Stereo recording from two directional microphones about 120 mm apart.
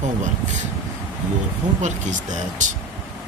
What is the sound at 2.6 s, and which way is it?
Speech, 90° right.